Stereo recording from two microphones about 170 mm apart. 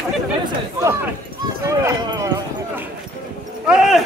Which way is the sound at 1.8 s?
20° right (ahead or behind).